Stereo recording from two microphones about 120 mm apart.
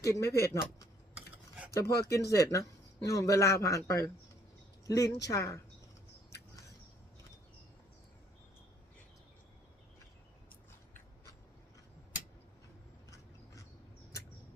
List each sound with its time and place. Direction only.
0.0 s a man's voice: 25° left (ahead or behind)
1.7 s a man's voice: 25° left (ahead or behind)